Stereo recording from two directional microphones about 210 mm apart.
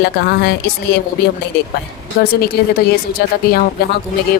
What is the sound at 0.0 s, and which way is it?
Speech, 50° left (ahead or behind).